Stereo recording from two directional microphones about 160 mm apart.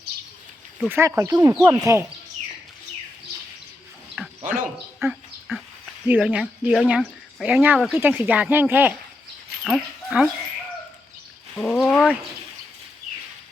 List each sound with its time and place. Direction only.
0.9 s speech: 15° right (ahead or behind)
4.2 s dog: 5° right (ahead or behind)
4.9 s a sound: centre (ahead or behind)
6.1 s speech: 10° right (ahead or behind)
9.6 s speech: centre (ahead or behind)
11.5 s speech: 5° left (ahead or behind)